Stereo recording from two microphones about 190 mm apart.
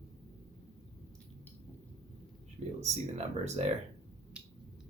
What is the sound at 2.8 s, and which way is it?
Speech, 35° right (ahead or behind).